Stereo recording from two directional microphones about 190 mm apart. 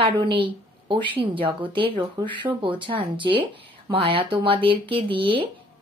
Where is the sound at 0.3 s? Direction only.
25° right (ahead or behind).